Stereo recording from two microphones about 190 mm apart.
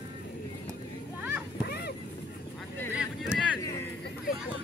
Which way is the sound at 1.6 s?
60° left (ahead or behind).